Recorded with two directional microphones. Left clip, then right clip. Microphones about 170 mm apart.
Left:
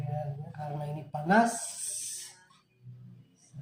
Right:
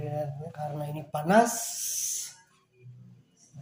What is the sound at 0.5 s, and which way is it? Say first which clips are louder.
Speech: right 2 dB; 60° right (ahead or behind).